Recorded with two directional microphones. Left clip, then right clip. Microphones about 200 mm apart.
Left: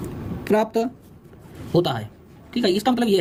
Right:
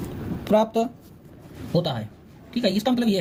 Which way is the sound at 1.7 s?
40° left (ahead or behind).